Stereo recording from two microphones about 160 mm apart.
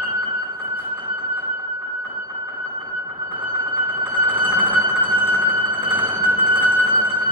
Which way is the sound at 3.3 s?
10° right (ahead or behind).